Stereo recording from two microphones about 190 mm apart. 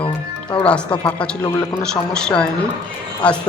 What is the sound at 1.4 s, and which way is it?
Speech, 20° left (ahead or behind).